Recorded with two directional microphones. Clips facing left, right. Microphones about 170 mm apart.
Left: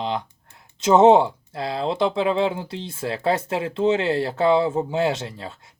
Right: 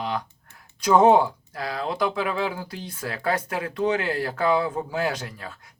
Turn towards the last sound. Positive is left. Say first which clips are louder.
# left 4 dB
turn(degrees=25)  # may be behind; listen again after turning